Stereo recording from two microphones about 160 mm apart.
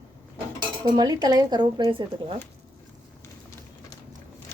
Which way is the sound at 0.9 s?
25° right (ahead or behind).